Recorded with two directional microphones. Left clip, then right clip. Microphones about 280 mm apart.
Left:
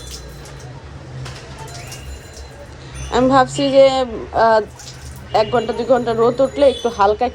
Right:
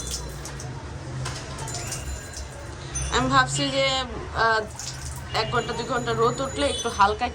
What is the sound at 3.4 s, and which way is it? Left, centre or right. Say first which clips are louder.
Speech: left 8 dB; left.